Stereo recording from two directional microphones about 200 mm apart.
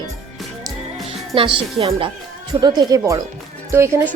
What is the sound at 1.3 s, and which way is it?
A woman's voice, 25° right (ahead or behind).